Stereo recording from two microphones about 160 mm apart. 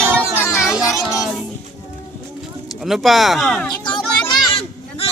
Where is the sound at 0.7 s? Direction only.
20° left (ahead or behind).